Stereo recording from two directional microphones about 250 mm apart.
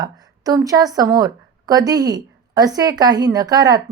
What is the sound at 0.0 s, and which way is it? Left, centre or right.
A woman's voice, centre.